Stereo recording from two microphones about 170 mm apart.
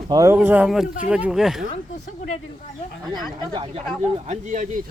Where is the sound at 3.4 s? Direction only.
30° right (ahead or behind).